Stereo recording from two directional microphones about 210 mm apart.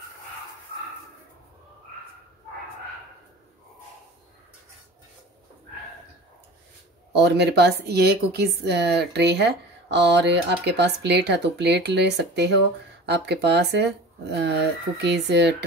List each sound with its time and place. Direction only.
7.1 s speech: 50° right (ahead or behind)